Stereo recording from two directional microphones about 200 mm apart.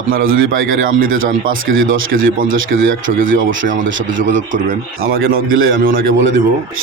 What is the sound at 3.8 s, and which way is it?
Speech, 70° right (ahead or behind).